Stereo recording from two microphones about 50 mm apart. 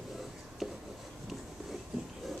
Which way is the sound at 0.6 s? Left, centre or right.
Centre.